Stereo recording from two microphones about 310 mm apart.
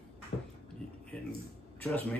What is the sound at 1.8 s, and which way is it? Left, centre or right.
Speech, centre.